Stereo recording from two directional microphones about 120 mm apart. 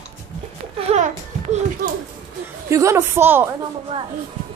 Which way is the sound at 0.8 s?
70° right (ahead or behind).